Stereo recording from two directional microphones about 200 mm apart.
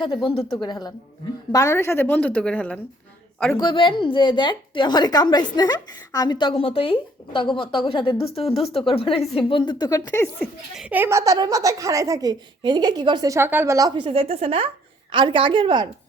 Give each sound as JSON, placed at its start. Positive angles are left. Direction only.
{"t": 0.0, "sound": "a woman's voice", "side_deg": 25}
{"t": 3.6, "sound": "a woman's voice", "side_deg": 25}
{"t": 10.1, "sound": "a woman's voice", "side_deg": 10}
{"t": 10.8, "sound": "speech", "side_deg": -5}